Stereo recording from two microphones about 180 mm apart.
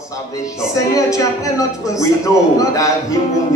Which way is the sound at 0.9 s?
20° left (ahead or behind).